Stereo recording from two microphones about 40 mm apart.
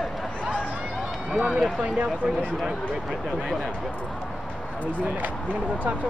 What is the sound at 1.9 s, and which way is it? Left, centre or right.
Speech, right.